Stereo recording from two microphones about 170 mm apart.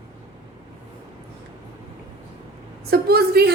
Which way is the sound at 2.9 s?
65° right (ahead or behind).